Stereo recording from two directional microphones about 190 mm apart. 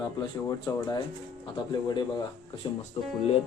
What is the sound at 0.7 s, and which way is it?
Speech, 20° left (ahead or behind).